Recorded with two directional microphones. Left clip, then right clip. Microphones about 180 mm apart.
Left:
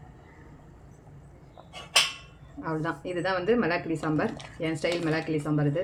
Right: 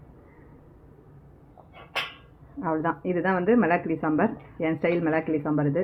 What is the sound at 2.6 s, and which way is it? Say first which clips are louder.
Speech: right 5 dB; 30° right (ahead or behind).